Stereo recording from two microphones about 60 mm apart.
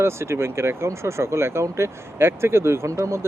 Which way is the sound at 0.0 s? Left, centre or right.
Right.